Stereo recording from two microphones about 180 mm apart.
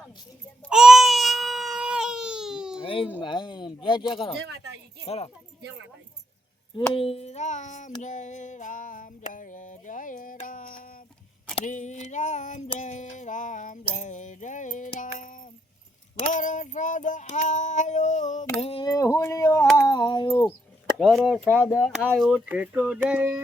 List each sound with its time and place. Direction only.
0.7 s baby cry: 5° right (ahead or behind)
2.8 s baby cry: 30° left (ahead or behind)
3.2 s speech: 25° left (ahead or behind)
5.0 s a sound: 35° left (ahead or behind)
6.9 s a sound: 35° left (ahead or behind); by 11.0 s 50° left (ahead or behind)
11.5 s child singing: 45° left (ahead or behind)
12.8 s a sound: 40° left (ahead or behind)
15.2 s music: 45° left (ahead or behind)
16.2 s child singing: 45° left (ahead or behind)
18.6 s speech: 30° left (ahead or behind)
19.7 s a sound: 25° left (ahead or behind)
21.0 s speech: centre (ahead or behind)